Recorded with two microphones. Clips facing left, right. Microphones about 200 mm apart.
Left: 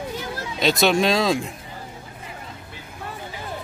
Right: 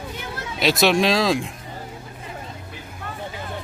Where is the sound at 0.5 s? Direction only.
Centre (ahead or behind).